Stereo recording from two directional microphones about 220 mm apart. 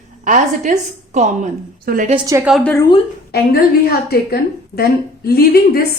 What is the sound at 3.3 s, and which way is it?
A woman's voice, 45° left (ahead or behind).